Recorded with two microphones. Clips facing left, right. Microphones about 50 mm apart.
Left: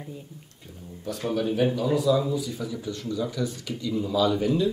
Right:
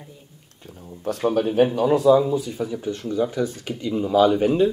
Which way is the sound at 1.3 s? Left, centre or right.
Right.